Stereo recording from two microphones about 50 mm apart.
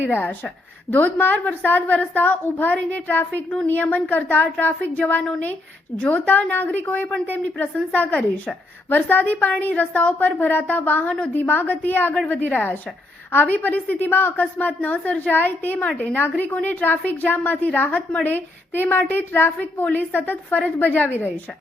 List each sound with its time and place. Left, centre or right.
0.0 s a woman's voice: left
13.3 s a woman's voice: left